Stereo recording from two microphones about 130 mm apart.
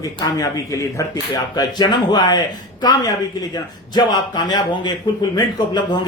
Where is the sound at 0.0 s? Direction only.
25° left (ahead or behind).